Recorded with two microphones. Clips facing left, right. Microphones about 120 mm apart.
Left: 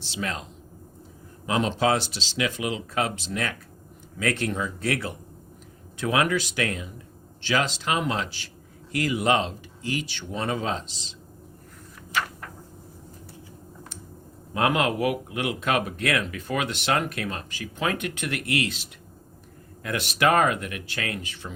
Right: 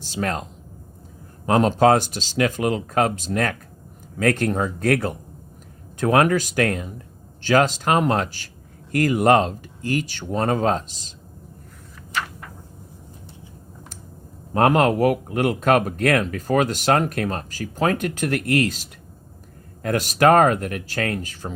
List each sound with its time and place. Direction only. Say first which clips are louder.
0.0 s speech: right 6 dB; 45° right (ahead or behind)
1.5 s speech: right 7 dB; 45° right (ahead or behind)
14.5 s speech: right 6 dB; 45° right (ahead or behind)